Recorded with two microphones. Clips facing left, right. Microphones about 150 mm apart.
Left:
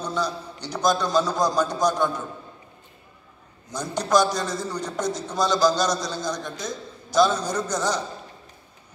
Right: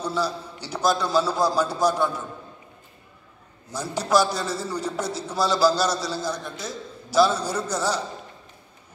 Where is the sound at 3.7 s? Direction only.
5° right (ahead or behind).